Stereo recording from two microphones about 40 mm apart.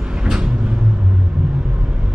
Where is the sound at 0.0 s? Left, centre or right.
Centre.